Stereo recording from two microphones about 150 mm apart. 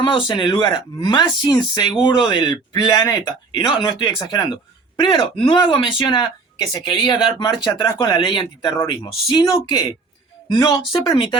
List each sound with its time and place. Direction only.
0.0 s speech: 35° left (ahead or behind)